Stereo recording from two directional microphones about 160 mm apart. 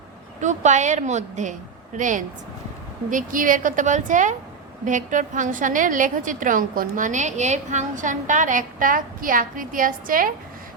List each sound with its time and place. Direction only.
0.4 s a woman's voice: 50° right (ahead or behind)